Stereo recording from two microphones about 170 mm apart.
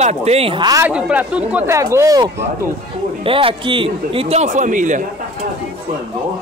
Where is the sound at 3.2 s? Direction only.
30° right (ahead or behind); by 5.0 s 50° right (ahead or behind).